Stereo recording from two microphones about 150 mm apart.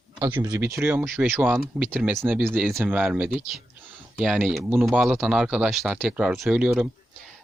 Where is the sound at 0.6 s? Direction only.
15° right (ahead or behind).